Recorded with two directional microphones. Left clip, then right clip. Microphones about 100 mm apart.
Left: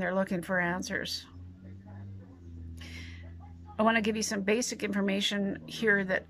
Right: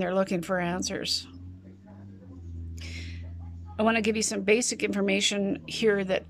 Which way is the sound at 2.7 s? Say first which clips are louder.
Right 4 dB; 5° right (ahead or behind).